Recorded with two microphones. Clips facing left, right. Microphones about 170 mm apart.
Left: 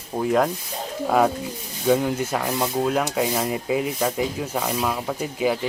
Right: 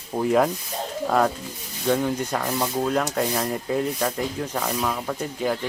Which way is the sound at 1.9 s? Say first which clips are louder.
Left 2 dB; 10° left (ahead or behind).